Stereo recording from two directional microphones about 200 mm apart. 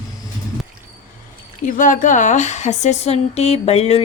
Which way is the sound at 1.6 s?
40° left (ahead or behind).